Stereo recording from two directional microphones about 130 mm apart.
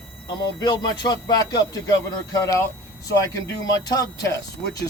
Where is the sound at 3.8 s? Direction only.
25° left (ahead or behind).